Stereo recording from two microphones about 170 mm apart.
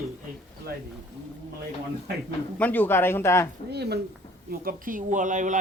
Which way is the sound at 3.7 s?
75° right (ahead or behind).